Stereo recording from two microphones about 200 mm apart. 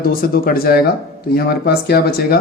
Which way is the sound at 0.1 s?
45° left (ahead or behind).